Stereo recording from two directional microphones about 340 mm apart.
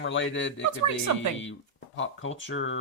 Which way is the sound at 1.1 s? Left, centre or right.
Right.